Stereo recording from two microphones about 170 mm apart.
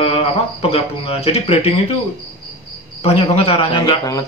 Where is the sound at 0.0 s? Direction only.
35° left (ahead or behind).